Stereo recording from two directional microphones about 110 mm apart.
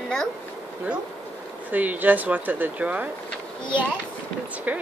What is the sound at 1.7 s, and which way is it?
A woman's voice, 15° right (ahead or behind).